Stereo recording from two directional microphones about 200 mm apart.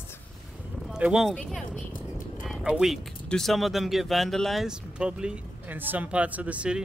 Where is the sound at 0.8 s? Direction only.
5° right (ahead or behind).